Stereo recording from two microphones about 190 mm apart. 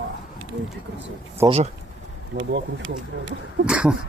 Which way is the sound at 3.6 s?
5° right (ahead or behind).